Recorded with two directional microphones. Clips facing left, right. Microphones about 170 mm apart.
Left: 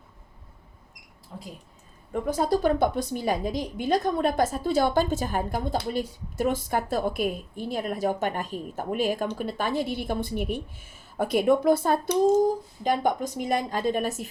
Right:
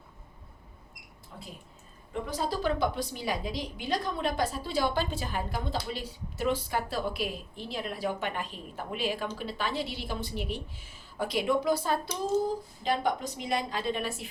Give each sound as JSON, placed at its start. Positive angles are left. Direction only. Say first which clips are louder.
{"t": 1.3, "sound": "speech", "louder": "left 5 dB", "side_deg": 30}
{"t": 2.1, "sound": "a woman's voice", "louder": "left 7 dB", "side_deg": 50}